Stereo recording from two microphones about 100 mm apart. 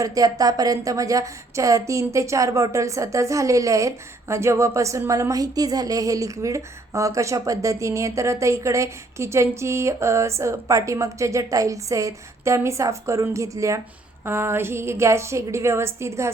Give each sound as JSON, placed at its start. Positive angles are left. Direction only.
{"t": 0.0, "sound": "a woman's voice", "side_deg": -35}